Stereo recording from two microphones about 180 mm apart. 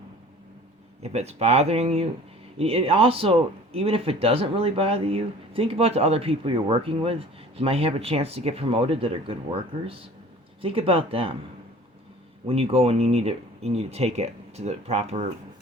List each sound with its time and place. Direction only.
1.0 s speech: 35° right (ahead or behind)
12.5 s speech: 30° right (ahead or behind)